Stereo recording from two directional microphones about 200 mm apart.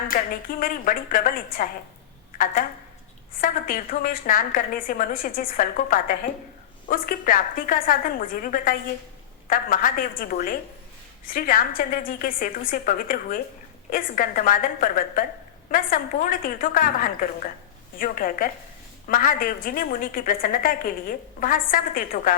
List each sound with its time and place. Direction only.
0.1 s a woman's voice: 45° left (ahead or behind)
3.4 s a woman's voice: 45° left (ahead or behind)